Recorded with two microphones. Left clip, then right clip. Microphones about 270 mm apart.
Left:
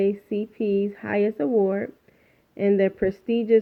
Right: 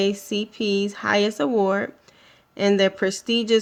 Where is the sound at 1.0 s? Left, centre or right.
Centre.